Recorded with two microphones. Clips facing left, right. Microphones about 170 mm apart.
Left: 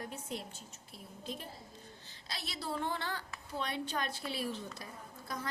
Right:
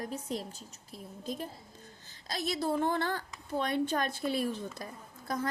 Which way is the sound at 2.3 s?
45° right (ahead or behind).